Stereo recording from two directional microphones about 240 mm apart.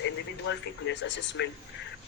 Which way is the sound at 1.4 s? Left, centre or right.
Left.